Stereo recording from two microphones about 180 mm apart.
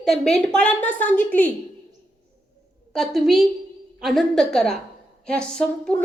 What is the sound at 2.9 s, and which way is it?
A woman's voice, centre (ahead or behind).